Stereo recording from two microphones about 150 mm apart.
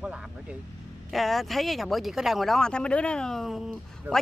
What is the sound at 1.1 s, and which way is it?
Speech, centre (ahead or behind).